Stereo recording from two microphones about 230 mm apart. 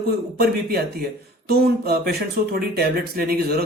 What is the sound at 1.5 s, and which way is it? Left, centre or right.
Speech, right.